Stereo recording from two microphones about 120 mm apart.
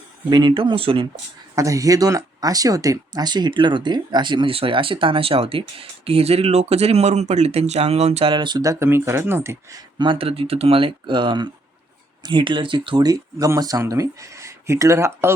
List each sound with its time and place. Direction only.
0.3 s speech: 40° right (ahead or behind)
1.5 s speech: 25° right (ahead or behind); by 8.3 s 60° right (ahead or behind)
8.3 s speech: 40° right (ahead or behind); by 9.8 s 25° right (ahead or behind)
10.0 s speech: 50° right (ahead or behind); by 15.3 s 25° right (ahead or behind)